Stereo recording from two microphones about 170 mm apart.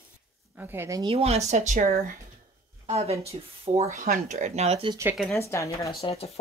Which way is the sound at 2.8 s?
35° right (ahead or behind).